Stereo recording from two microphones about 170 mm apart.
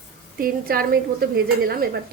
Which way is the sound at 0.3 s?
60° right (ahead or behind).